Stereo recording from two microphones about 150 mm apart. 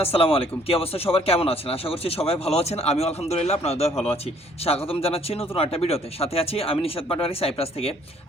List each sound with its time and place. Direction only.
0.0 s speech: 40° left (ahead or behind)